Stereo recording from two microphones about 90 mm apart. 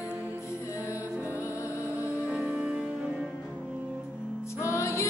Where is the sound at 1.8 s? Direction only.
30° left (ahead or behind).